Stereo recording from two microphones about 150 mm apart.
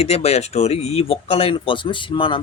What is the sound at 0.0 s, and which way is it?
A man's voice, 40° left (ahead or behind).